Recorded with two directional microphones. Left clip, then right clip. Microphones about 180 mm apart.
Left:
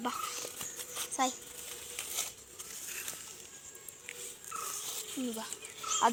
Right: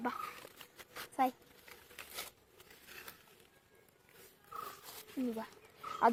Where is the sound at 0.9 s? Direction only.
Centre (ahead or behind).